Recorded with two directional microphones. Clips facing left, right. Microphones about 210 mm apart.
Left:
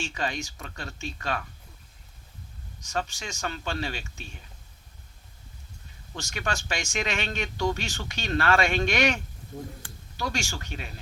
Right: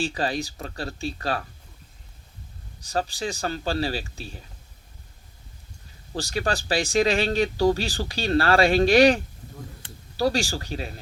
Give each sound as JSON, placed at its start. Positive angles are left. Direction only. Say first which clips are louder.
{"t": 0.0, "sound": "speech", "louder": "right 6 dB", "side_deg": -35}
{"t": 2.8, "sound": "speech", "louder": "right 5 dB", "side_deg": -35}
{"t": 6.1, "sound": "speech", "louder": "right 6 dB", "side_deg": -35}